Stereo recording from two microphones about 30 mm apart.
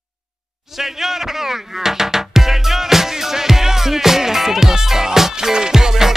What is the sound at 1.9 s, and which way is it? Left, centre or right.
Music, centre.